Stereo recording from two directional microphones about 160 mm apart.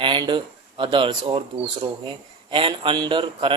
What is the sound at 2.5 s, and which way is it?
Speech, 35° right (ahead or behind).